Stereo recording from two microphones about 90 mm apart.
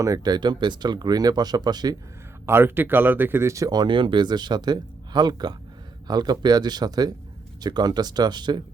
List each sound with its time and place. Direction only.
0.0 s speech: 45° right (ahead or behind)
2.5 s speech: 25° right (ahead or behind); by 3.8 s 40° right (ahead or behind)
3.8 s speech: 65° right (ahead or behind)